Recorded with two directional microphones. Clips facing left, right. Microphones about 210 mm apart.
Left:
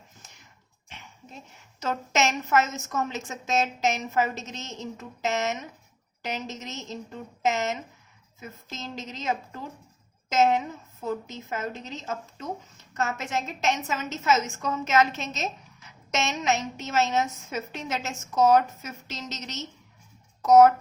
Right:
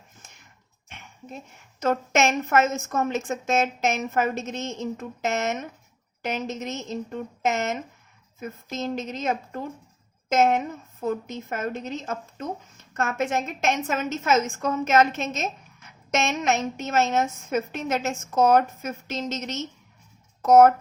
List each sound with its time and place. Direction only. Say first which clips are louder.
0.9 s dog: right 6 dB; 55° right (ahead or behind)
1.8 s speech: right 4 dB; 50° right (ahead or behind)